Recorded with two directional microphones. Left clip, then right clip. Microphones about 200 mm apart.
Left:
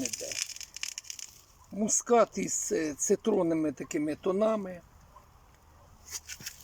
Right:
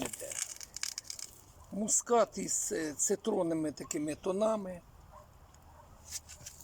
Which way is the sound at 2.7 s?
10° left (ahead or behind).